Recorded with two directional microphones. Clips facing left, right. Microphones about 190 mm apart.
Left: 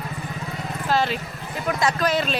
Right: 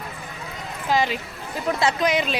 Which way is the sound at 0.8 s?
15° right (ahead or behind).